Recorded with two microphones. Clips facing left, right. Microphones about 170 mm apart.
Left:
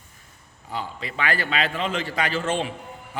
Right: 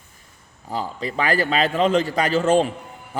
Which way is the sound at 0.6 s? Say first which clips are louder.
Right 5 dB; 40° right (ahead or behind).